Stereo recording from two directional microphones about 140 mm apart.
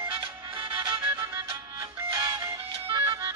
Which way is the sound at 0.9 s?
20° right (ahead or behind).